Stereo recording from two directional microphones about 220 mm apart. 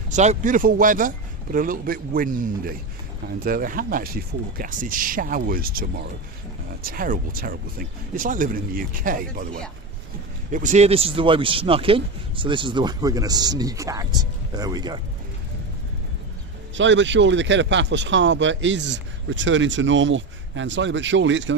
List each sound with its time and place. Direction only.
0.1 s speech: 30° right (ahead or behind)
10.5 s speech: 35° right (ahead or behind); by 15.0 s 20° right (ahead or behind)
16.7 s speech: 55° right (ahead or behind)